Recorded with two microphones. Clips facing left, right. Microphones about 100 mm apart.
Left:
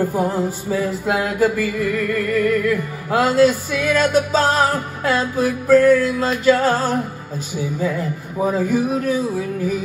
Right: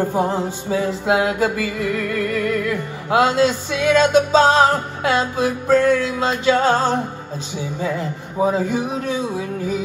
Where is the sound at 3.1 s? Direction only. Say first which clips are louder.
Left 1 dB; 25° right (ahead or behind).